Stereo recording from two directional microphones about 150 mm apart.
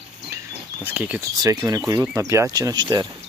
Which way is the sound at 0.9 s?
10° right (ahead or behind).